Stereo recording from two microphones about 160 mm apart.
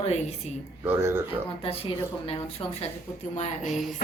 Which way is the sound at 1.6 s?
35° left (ahead or behind).